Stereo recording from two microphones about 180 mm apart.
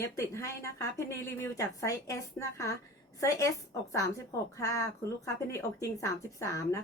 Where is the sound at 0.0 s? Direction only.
15° left (ahead or behind).